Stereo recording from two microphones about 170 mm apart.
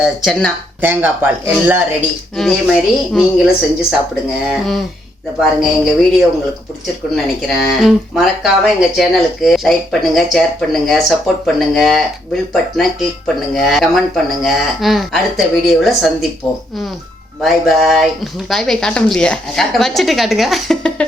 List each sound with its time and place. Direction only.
0.0 s speech: centre (ahead or behind)
0.8 s speech: 10° right (ahead or behind)
7.4 s speech: centre (ahead or behind)
17.4 s speech: centre (ahead or behind)